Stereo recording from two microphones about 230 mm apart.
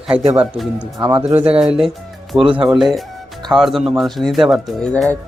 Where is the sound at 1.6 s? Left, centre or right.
Centre.